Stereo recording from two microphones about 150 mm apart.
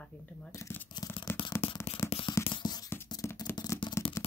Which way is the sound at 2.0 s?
20° left (ahead or behind).